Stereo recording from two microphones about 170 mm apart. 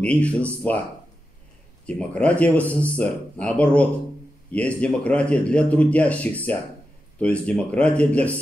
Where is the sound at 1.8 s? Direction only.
5° left (ahead or behind).